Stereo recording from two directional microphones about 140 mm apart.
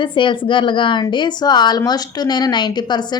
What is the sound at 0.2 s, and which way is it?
A woman's voice, 35° left (ahead or behind).